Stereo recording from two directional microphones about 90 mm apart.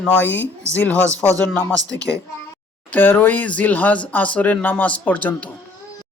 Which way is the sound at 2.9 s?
20° left (ahead or behind).